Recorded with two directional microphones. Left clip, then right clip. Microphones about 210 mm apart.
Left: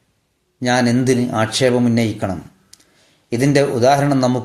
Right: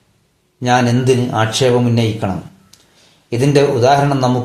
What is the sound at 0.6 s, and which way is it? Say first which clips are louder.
A man's voice: right 2 dB; 40° left (ahead or behind).